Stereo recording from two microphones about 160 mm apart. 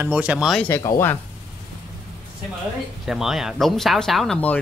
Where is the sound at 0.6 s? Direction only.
15° left (ahead or behind).